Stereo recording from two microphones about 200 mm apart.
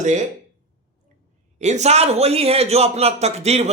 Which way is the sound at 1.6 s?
35° right (ahead or behind).